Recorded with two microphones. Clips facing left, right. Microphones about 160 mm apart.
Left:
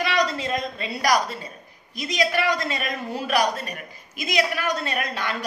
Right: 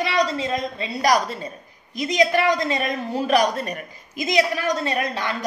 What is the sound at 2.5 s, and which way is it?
Speech, 20° right (ahead or behind).